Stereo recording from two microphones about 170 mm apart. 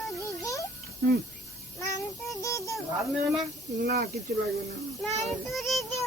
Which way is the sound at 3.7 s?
80° right.